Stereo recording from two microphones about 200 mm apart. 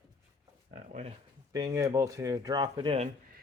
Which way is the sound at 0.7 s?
35° right (ahead or behind).